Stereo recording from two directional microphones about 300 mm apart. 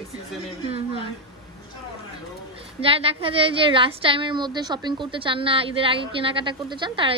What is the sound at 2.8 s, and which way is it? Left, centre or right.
A woman's voice, centre.